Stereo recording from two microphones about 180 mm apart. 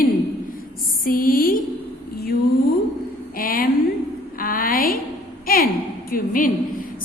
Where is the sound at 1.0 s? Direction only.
50° left (ahead or behind).